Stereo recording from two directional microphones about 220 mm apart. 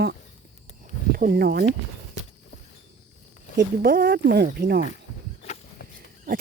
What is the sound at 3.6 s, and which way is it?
Speech, 40° right (ahead or behind).